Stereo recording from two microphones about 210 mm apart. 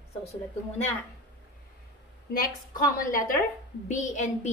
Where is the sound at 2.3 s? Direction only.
40° left (ahead or behind).